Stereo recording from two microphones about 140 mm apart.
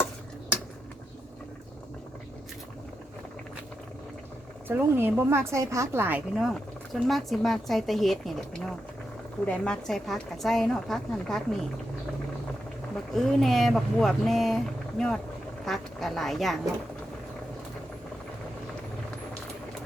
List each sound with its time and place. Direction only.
4.7 s a woman's voice: 15° right (ahead or behind)
6.3 s speech: centre (ahead or behind)
13.1 s speech: centre (ahead or behind)